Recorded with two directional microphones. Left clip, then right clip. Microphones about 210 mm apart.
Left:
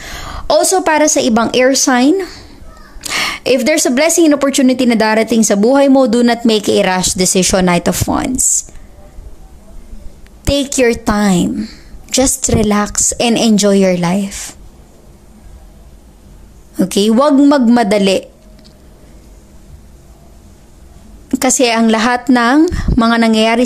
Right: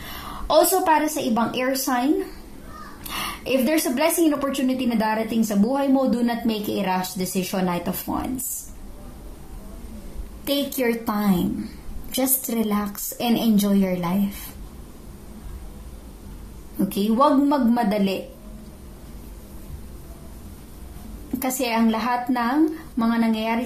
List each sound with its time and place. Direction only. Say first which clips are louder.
0.3 s a woman's voice: left 7 dB; 50° left (ahead or behind)
10.4 s a woman's voice: left 11 dB; 40° left (ahead or behind)
16.7 s a woman's voice: left 11 dB; 50° left (ahead or behind)
21.4 s a woman's voice: left 12 dB; 45° left (ahead or behind)